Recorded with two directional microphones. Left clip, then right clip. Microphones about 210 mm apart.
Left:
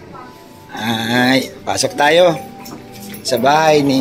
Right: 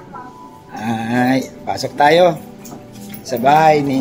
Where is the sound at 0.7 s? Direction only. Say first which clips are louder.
Left 3 dB; 10° right (ahead or behind).